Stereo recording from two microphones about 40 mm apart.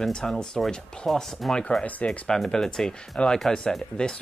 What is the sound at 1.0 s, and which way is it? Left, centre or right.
Speech, centre.